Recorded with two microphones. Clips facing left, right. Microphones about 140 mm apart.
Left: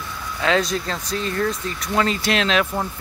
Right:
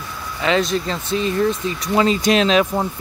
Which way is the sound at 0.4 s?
Centre (ahead or behind).